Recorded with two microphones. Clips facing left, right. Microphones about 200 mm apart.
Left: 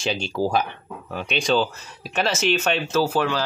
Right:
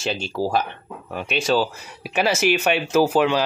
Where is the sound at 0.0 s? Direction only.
5° right (ahead or behind).